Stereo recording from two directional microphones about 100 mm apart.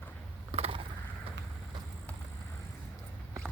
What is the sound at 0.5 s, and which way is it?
Mechanisms, 80° right.